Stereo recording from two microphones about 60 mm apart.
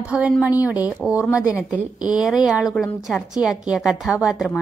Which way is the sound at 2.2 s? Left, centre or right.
Centre.